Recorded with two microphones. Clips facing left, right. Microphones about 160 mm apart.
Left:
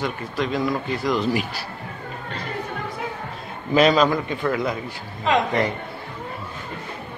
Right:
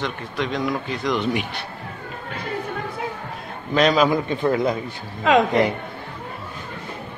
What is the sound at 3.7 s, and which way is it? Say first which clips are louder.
Speech: left 1 dB; centre (ahead or behind).